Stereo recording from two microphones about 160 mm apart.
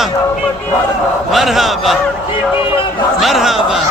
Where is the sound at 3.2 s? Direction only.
Centre (ahead or behind).